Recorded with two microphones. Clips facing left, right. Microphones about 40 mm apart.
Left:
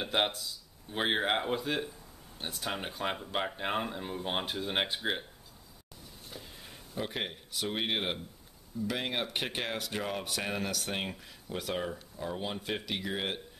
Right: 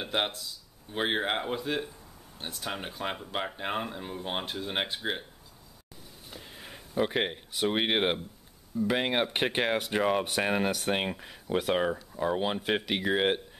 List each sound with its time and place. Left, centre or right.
0.0 s speech: centre
6.3 s speech: right